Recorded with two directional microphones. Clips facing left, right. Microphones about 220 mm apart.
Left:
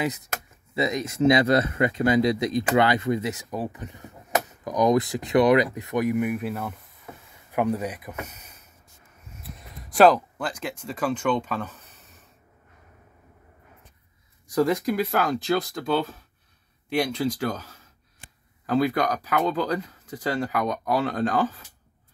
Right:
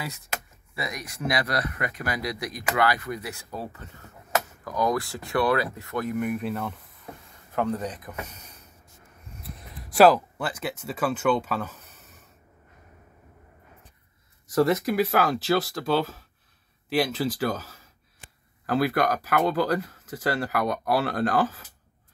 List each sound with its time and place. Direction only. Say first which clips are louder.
0.7 s speech: left 10 dB; 25° left (ahead or behind); by 11.8 s 5° right (ahead or behind)
14.5 s speech: even; 5° right (ahead or behind)